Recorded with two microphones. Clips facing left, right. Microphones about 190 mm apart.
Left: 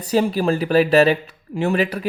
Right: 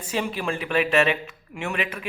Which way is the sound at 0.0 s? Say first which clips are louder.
Left 9 dB; 40° left (ahead or behind).